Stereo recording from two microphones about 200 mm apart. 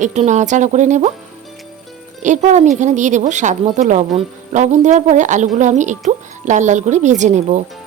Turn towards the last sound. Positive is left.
turn(degrees=-35)  # may be behind; listen again after turning